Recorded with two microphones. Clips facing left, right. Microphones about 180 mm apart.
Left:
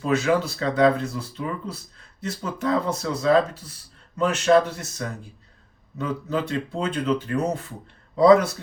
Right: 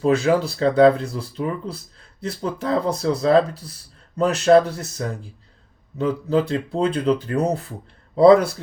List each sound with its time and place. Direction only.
0.0 s speech: 35° right (ahead or behind)